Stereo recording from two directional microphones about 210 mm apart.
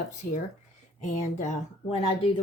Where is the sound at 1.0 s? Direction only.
35° left (ahead or behind).